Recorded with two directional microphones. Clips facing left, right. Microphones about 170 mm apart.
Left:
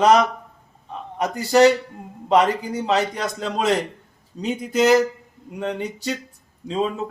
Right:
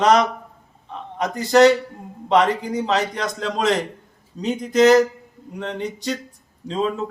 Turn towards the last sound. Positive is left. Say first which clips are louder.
# even
turn(degrees=5)  # may be behind; listen again after turning